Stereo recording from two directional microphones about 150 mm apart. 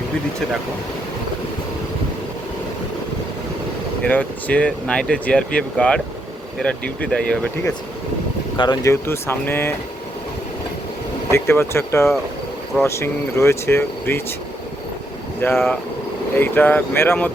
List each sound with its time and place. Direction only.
4.0 s speech: 10° left (ahead or behind)
8.5 s speech: 30° left (ahead or behind)
11.3 s speech: 15° left (ahead or behind)
15.5 s speech: centre (ahead or behind)
16.3 s speech: 15° left (ahead or behind)